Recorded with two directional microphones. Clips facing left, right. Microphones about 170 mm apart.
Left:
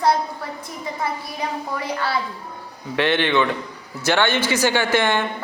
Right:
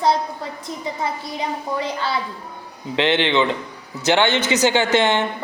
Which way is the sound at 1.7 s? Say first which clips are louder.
Even; 20° right (ahead or behind).